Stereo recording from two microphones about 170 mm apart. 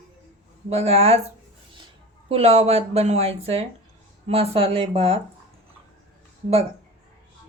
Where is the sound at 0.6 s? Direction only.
35° right (ahead or behind).